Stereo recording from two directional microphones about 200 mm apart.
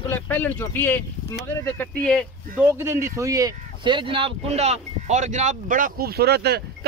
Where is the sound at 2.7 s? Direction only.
15° right (ahead or behind).